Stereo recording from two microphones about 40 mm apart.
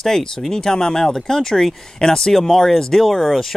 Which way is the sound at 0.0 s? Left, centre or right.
Centre.